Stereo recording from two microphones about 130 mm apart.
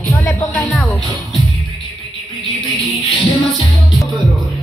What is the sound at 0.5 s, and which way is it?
Music, 10° left (ahead or behind).